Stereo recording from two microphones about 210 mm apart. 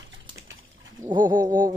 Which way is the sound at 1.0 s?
20° right (ahead or behind).